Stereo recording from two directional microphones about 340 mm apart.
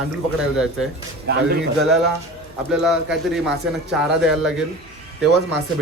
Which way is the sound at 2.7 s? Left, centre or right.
Centre.